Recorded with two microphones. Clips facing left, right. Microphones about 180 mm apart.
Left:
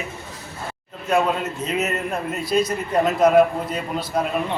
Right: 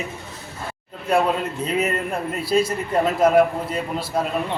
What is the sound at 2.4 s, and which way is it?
Speech, 30° right (ahead or behind).